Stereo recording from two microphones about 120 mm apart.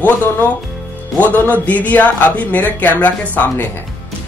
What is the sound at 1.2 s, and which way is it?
Speech, 15° left (ahead or behind).